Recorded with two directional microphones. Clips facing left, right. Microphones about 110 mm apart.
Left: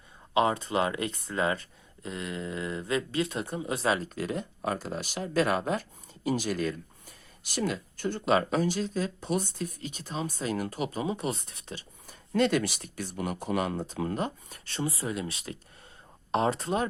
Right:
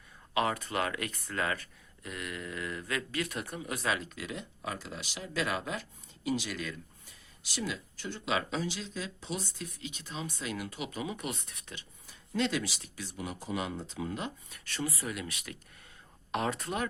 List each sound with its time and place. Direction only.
0.3 s speech: 25° left (ahead or behind)
12.0 s speech: 55° left (ahead or behind)
14.6 s speech: 30° left (ahead or behind)